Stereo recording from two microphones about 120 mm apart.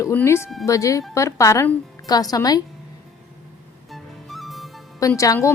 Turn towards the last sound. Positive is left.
turn(degrees=25)  # may be behind; listen again after turning